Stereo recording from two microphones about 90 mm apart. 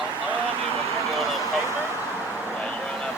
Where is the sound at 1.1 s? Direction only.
Centre (ahead or behind).